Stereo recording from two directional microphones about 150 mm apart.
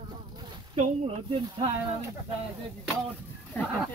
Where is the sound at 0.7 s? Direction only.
40° right (ahead or behind).